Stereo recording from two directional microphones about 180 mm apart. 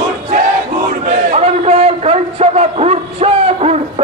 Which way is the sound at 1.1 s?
35° right (ahead or behind).